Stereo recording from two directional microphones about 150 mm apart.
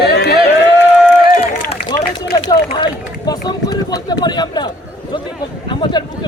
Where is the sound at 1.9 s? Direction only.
25° left (ahead or behind).